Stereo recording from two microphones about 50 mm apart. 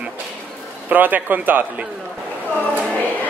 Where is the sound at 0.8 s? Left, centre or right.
Right.